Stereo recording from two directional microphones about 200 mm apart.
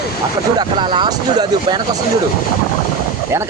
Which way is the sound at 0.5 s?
25° right (ahead or behind).